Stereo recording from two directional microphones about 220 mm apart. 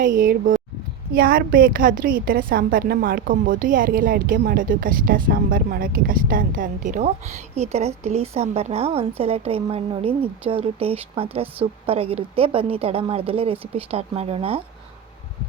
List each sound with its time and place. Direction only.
0.0 s a woman's voice: 40° right (ahead or behind)